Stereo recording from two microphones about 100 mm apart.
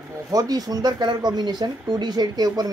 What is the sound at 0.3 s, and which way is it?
Speech, 40° right (ahead or behind).